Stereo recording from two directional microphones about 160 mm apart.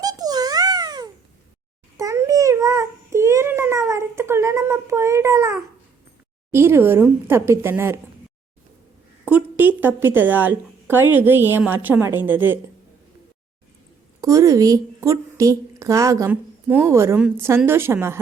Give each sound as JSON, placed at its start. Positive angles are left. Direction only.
{"t": 0.0, "sound": "a sound", "side_deg": -25}
{"t": 2.0, "sound": "babbling", "side_deg": -20}
{"t": 6.5, "sound": "a woman's voice", "side_deg": -15}
{"t": 9.3, "sound": "a woman's voice", "side_deg": -10}
{"t": 14.2, "sound": "a woman's voice", "side_deg": -20}